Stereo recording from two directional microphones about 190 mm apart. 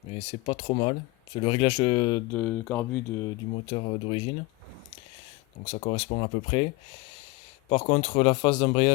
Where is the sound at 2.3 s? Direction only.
10° left (ahead or behind).